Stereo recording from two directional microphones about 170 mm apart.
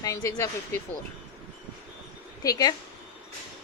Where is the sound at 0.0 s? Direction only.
20° left (ahead or behind).